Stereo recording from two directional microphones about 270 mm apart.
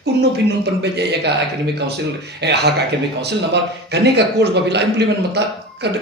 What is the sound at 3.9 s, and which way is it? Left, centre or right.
Speech, right.